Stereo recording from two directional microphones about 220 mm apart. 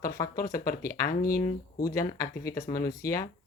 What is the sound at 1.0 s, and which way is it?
Speech, 40° left (ahead or behind).